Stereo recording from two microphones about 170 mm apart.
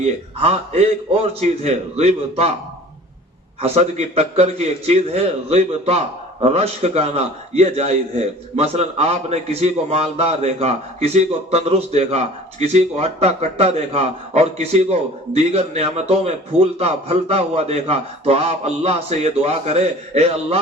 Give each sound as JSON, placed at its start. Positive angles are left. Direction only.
{"t": 0.4, "sound": "a man's voice", "side_deg": -40}
{"t": 3.6, "sound": "a man's voice", "side_deg": -40}